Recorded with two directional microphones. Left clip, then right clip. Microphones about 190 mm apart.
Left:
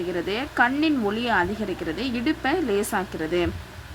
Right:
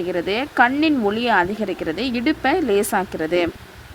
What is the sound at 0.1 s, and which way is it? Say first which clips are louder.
Speech: right 5 dB; 35° right (ahead or behind).